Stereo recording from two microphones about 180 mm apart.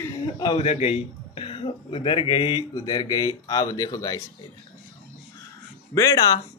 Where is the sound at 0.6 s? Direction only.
35° left (ahead or behind); by 4.2 s 20° left (ahead or behind).